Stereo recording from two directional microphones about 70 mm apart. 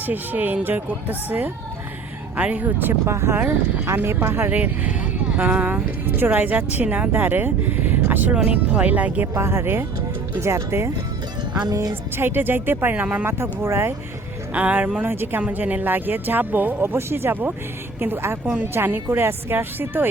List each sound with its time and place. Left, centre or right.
0.0 s speech: right
3.1 s speech: right
4.5 s speech: right
9.2 s speech: right
11.7 s speech: right
12.1 s speech: right
13.2 s speech: right
14.5 s speech: right